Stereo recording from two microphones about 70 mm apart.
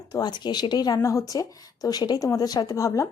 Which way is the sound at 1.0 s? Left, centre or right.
Left.